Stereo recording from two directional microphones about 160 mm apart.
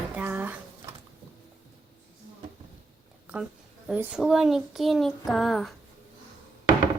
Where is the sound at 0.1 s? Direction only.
10° right (ahead or behind).